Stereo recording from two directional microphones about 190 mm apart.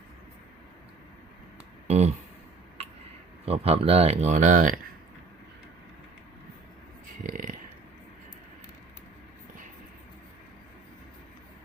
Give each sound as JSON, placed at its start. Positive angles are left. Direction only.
{"t": 1.9, "sound": "speech", "side_deg": -35}
{"t": 3.4, "sound": "speech", "side_deg": -30}
{"t": 7.2, "sound": "a sound", "side_deg": -45}